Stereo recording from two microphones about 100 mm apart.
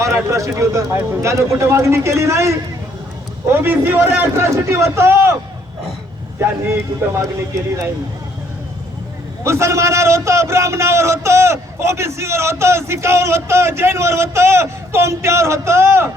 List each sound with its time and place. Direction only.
0.3 s a man's voice: 30° right (ahead or behind)
7.2 s a man's voice: 30° right (ahead or behind)
9.4 s a man's voice: 30° right (ahead or behind)